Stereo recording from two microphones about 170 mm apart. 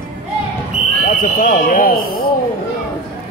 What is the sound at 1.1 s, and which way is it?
Speech, 55° left (ahead or behind).